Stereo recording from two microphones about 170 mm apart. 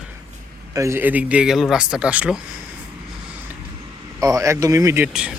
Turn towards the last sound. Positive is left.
turn(degrees=-15)  # may be behind; listen again after turning